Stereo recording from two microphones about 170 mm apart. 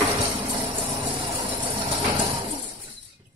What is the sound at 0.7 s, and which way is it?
Vehicle, 30° right (ahead or behind).